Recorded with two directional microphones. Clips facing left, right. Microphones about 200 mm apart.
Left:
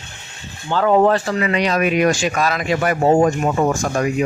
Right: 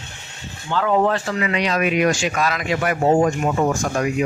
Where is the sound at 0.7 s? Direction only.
40° left (ahead or behind).